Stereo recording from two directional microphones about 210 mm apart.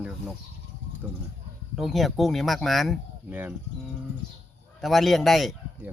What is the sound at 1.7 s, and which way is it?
Chicken, centre (ahead or behind).